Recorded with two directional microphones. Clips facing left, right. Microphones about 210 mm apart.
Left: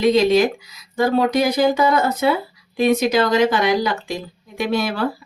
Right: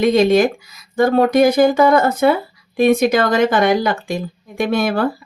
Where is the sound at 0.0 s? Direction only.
50° right (ahead or behind).